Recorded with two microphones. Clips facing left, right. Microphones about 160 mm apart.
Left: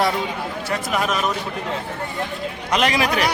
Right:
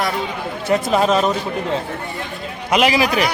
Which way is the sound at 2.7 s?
5° right (ahead or behind).